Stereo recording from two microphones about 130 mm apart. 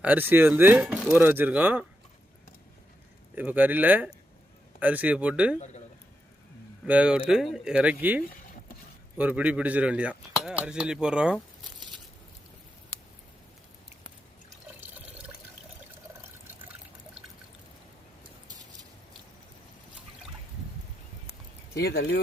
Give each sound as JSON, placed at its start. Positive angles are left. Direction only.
{"t": 0.0, "sound": "speech", "side_deg": -15}
{"t": 3.3, "sound": "speech", "side_deg": -15}
{"t": 5.5, "sound": "a man's voice", "side_deg": 60}
{"t": 6.8, "sound": "speech", "side_deg": -10}
{"t": 14.8, "sound": "water", "side_deg": -15}